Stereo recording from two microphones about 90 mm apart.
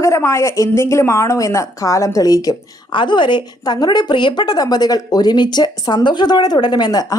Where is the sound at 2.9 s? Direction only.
60° left (ahead or behind).